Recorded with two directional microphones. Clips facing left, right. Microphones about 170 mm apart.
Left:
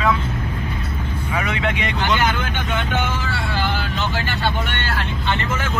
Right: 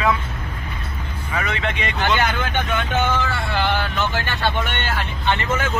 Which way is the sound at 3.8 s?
60° right (ahead or behind).